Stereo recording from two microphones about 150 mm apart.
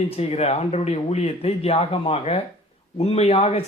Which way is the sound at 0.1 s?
45° left (ahead or behind).